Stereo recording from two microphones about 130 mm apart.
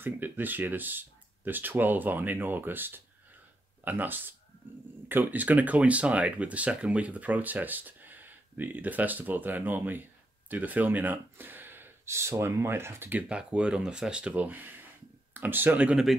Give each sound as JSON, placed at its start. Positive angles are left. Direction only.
{"t": 0.0, "sound": "speech", "side_deg": -15}